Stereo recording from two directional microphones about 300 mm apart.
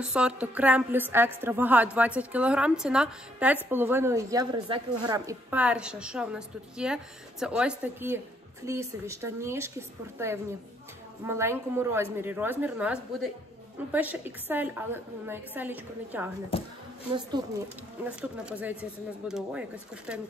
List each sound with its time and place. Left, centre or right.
0.0 s a woman's voice: centre
16.5 s speech: centre
17.1 s a woman's voice: centre